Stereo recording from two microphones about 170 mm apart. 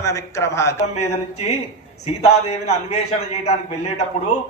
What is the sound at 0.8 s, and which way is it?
A man's voice, 40° left (ahead or behind).